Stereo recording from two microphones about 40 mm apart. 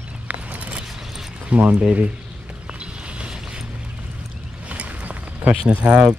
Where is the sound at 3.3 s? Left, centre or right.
Centre.